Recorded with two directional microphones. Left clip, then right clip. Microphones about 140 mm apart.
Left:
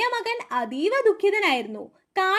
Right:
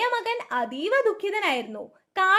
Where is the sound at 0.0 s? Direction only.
45° left (ahead or behind).